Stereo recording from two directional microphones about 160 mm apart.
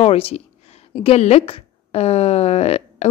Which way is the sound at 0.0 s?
40° left (ahead or behind).